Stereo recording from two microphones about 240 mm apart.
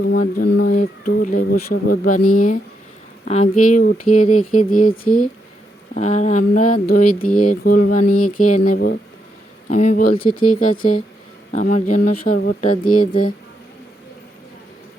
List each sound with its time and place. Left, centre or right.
0.0 s speech: left
2.2 s speech: left
3.2 s speech: left